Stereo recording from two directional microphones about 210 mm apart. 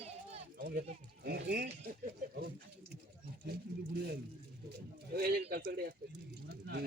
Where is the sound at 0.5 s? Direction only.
45° right (ahead or behind).